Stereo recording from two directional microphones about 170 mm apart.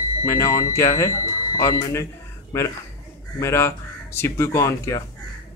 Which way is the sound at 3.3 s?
15° left (ahead or behind).